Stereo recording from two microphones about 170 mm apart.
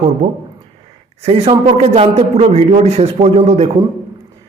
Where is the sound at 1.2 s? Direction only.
40° right (ahead or behind).